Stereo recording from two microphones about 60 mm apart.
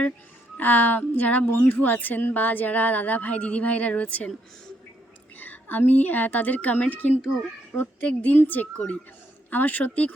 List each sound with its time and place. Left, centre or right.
0.5 s a woman's voice: left
5.4 s a woman's voice: left